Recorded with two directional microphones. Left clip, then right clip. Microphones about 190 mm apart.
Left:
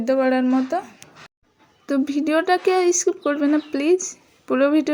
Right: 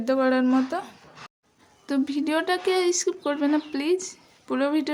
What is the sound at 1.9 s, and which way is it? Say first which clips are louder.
Speech: left 5 dB; 20° left (ahead or behind).